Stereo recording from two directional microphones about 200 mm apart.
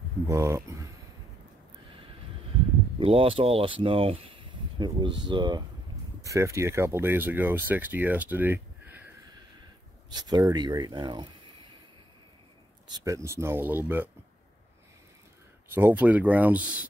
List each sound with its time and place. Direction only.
0.3 s speech: 15° right (ahead or behind)
3.0 s speech: 25° right (ahead or behind); by 9.1 s 10° right (ahead or behind)
10.0 s speech: 20° right (ahead or behind)
12.9 s speech: 15° right (ahead or behind)
15.7 s speech: 10° right (ahead or behind)